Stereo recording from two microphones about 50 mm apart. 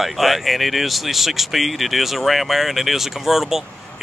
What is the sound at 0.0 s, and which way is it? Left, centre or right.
Speech, centre.